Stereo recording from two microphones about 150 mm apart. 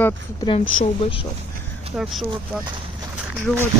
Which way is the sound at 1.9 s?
Centre (ahead or behind).